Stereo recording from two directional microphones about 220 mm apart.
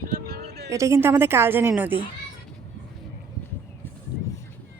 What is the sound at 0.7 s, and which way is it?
Speech, 15° right (ahead or behind).